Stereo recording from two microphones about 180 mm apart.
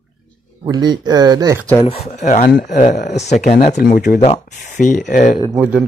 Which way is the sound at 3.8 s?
55° left (ahead or behind).